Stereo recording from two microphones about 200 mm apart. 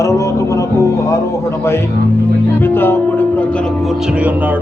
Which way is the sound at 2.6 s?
10° left (ahead or behind).